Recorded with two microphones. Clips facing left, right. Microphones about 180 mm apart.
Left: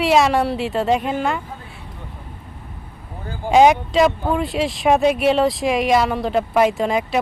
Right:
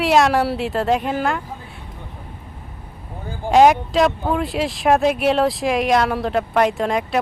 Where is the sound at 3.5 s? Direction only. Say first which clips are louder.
Even; centre (ahead or behind).